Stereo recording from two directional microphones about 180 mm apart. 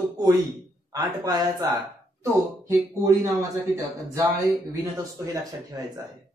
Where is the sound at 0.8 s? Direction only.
20° right (ahead or behind).